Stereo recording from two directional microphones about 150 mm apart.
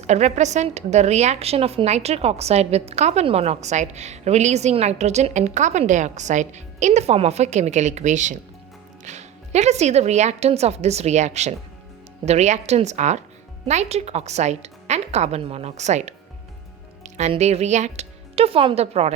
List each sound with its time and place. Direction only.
0.1 s a woman's voice: 50° right (ahead or behind)